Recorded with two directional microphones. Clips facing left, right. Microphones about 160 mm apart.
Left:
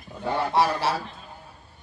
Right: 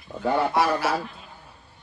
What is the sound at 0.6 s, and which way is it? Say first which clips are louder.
Speech: even; 30° left (ahead or behind).